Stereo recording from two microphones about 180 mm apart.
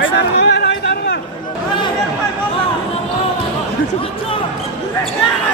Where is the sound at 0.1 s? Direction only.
65° left (ahead or behind).